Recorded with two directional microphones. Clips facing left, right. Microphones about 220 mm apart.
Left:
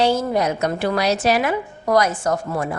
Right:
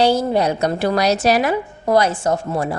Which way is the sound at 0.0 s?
35° right (ahead or behind).